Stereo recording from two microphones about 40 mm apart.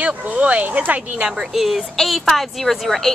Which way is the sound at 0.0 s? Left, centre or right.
Right.